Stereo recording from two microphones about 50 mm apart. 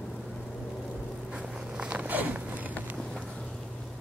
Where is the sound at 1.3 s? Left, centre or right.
Centre.